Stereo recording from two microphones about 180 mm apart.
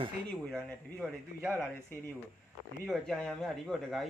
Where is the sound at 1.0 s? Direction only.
5° left (ahead or behind).